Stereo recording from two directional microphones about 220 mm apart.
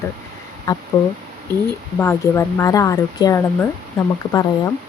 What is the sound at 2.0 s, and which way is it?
Speech, 10° left (ahead or behind).